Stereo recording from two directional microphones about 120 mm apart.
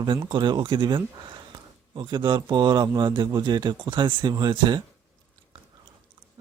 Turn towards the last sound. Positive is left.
turn(degrees=-35)  # may be behind; listen again after turning